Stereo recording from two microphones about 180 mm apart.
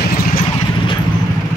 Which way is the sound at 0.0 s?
55° left (ahead or behind).